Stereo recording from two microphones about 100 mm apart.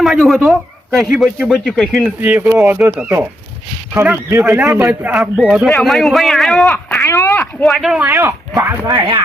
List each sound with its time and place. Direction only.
0.0 s a man's voice: centre (ahead or behind)
2.2 s speech: 20° right (ahead or behind)
4.3 s speech: 30° right (ahead or behind)
5.1 s speech: 5° right (ahead or behind)
5.6 s speech: 5° left (ahead or behind)
7.0 s speech: 25° left (ahead or behind)
7.6 s speech: centre (ahead or behind)
7.9 s speech: 20° right (ahead or behind)
8.9 s speech: 60° right (ahead or behind)